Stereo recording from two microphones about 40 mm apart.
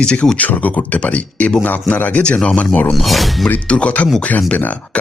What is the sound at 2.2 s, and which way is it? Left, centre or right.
Speech, left.